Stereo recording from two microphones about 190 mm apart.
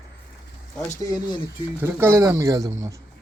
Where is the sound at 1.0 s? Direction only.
20° left (ahead or behind).